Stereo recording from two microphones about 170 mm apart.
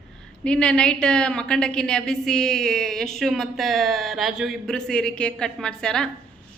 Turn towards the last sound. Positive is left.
turn(degrees=5)  # may be behind; listen again after turning